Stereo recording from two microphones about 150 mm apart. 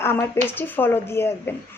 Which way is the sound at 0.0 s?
15° left (ahead or behind).